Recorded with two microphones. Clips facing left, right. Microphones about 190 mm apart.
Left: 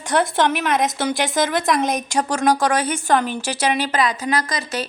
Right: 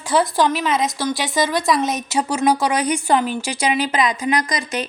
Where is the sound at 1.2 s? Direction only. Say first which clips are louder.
Even; centre (ahead or behind).